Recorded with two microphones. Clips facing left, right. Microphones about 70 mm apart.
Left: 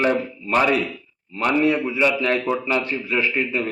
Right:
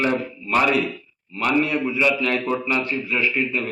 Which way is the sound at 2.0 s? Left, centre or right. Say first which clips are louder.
Even; left.